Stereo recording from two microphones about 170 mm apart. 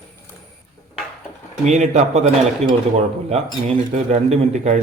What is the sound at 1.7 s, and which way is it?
A man's voice, 45° right (ahead or behind).